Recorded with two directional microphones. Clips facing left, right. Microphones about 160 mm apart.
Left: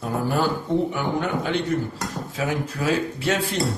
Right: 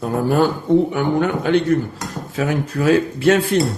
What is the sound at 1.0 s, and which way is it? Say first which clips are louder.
Speech: right 6 dB; 60° right (ahead or behind).